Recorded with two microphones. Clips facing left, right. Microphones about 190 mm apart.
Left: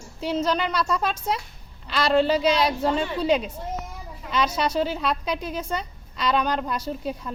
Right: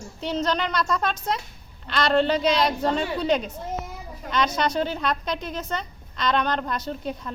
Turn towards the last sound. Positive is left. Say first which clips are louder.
# left 1 dB
turn(degrees=5)  # may be behind; listen again after turning